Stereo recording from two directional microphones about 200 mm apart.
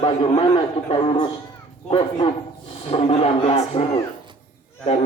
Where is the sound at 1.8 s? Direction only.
30° left (ahead or behind).